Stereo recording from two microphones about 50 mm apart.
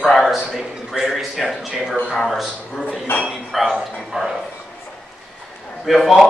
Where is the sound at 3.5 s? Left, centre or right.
Centre.